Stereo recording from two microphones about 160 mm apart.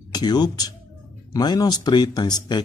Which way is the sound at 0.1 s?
25° left (ahead or behind).